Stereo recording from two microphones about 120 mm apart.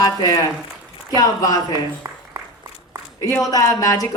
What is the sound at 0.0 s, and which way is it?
Speech, 30° left (ahead or behind).